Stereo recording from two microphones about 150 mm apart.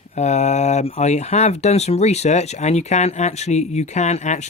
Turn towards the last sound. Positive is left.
turn(degrees=50)  # may be behind; listen again after turning